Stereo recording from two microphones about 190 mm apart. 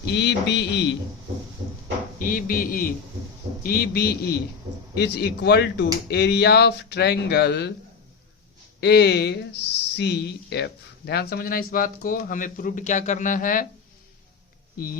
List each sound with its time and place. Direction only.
0.0 s speech: 65° left (ahead or behind)
2.1 s speech: 45° left (ahead or behind)
8.8 s speech: 60° left (ahead or behind); by 13.7 s 45° left (ahead or behind)